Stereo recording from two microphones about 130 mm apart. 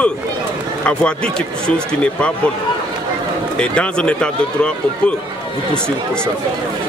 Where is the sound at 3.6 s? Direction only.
10° left (ahead or behind).